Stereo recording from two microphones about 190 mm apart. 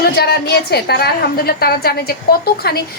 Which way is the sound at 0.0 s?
55° left (ahead or behind).